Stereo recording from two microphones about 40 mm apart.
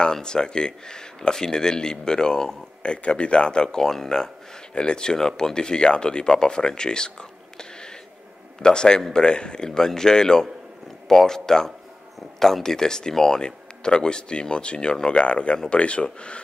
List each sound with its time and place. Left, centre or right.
0.0 s speech: centre